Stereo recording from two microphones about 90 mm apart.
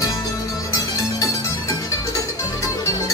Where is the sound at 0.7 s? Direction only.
40° left (ahead or behind).